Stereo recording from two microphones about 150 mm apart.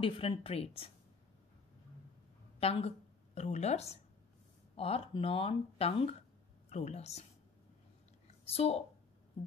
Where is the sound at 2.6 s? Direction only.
40° left (ahead or behind).